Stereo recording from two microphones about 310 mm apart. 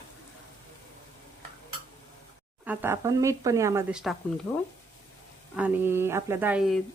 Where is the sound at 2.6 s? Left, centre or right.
Centre.